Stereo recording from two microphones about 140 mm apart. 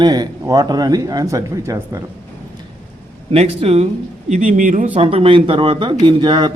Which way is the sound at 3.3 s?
50° right (ahead or behind).